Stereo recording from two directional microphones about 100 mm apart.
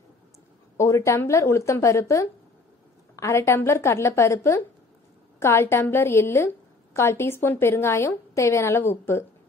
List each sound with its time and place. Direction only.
0.7 s a woman's voice: 30° left (ahead or behind)